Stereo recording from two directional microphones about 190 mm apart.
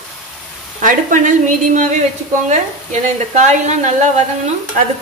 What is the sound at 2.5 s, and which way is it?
Speech, 40° right (ahead or behind).